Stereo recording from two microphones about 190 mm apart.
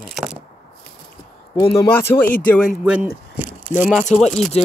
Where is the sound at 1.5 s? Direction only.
25° left (ahead or behind).